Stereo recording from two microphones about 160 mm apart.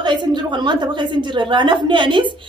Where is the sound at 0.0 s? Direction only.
30° right (ahead or behind).